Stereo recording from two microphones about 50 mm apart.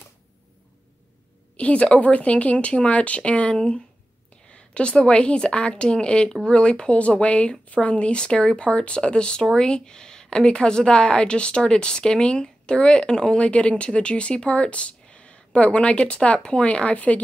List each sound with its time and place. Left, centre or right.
1.6 s speech: left